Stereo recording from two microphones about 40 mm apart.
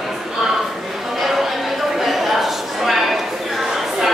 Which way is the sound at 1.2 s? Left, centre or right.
Centre.